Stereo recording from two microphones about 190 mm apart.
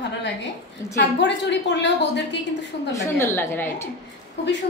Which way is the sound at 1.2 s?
65° left (ahead or behind).